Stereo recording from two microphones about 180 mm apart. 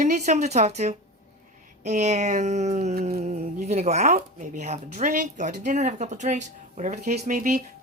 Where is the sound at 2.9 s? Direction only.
60° right (ahead or behind).